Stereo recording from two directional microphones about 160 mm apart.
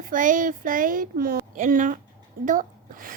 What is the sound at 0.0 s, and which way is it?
A woman's voice, 55° right (ahead or behind).